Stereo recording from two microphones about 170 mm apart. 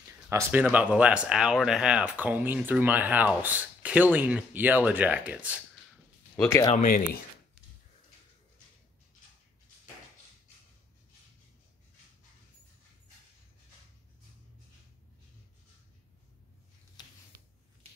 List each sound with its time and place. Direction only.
0.3 s speech: 15° right (ahead or behind)
6.7 s speech: 50° left (ahead or behind)
17.0 s a sound: 25° left (ahead or behind)